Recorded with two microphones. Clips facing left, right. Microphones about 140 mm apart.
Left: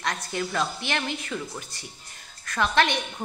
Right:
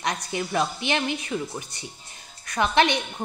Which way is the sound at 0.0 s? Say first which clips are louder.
Right 1 dB; 20° right (ahead or behind).